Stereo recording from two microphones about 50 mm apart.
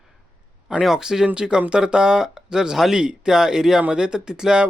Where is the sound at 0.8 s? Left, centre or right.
Centre.